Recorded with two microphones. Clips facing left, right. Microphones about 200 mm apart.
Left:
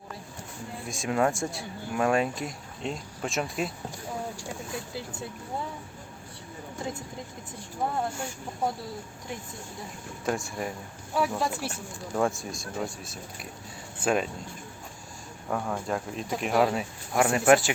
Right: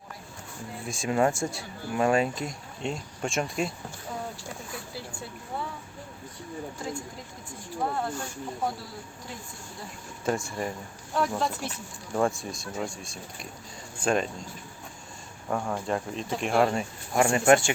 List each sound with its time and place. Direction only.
0.9 s speech: centre (ahead or behind)
4.4 s a sound: 15° left (ahead or behind)
7.9 s speech: 20° left (ahead or behind)
10.2 s speech: centre (ahead or behind)
15.4 s speech: centre (ahead or behind)